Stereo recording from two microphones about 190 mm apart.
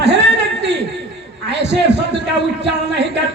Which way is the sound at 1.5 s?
65° right (ahead or behind).